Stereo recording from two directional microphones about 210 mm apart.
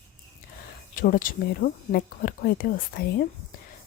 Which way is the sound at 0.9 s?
40° left (ahead or behind).